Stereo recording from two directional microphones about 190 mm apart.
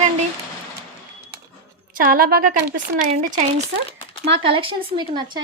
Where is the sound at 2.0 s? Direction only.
50° right (ahead or behind).